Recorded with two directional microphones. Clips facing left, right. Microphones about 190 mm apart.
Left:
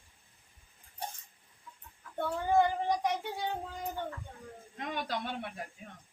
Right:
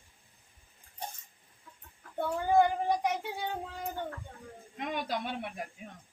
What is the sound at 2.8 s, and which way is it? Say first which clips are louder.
Speech: right 1 dB; 5° right (ahead or behind).